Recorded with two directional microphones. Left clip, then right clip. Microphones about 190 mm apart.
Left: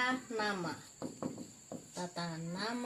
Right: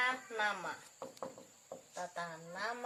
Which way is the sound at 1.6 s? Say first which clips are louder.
Even; centre (ahead or behind).